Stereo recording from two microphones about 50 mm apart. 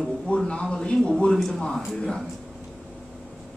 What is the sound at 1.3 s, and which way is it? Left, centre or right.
Speech, centre.